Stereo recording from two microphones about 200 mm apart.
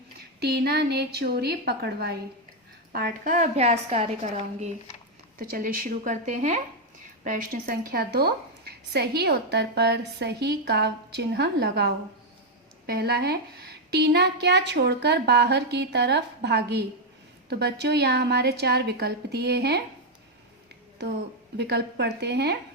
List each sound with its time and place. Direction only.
0.4 s a woman's voice: 55° right (ahead or behind); by 4.1 s 30° right (ahead or behind)
5.4 s a woman's voice: 45° right (ahead or behind)
21.6 s a woman's voice: 55° right (ahead or behind)